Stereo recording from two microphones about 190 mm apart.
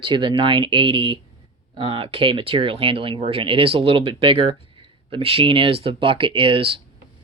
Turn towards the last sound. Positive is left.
turn(degrees=-30)  # may be behind; listen again after turning